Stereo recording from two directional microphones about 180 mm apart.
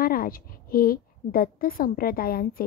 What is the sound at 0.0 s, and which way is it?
A woman's voice, 55° left (ahead or behind).